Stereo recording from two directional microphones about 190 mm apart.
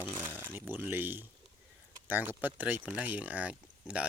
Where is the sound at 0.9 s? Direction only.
10° right (ahead or behind).